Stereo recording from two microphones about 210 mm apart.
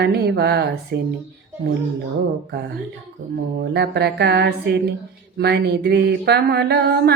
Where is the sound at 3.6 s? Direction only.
50° right (ahead or behind).